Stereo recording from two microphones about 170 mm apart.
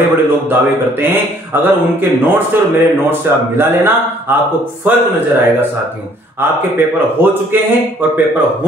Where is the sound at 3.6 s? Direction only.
15° right (ahead or behind).